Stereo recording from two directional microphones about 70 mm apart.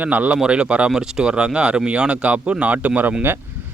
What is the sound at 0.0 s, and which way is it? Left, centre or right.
Speech, right.